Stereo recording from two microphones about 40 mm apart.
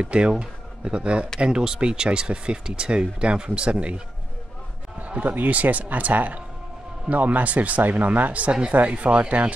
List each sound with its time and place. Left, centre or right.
0.0 s speech: right
4.9 s basketball bounce: right
5.3 s speech: right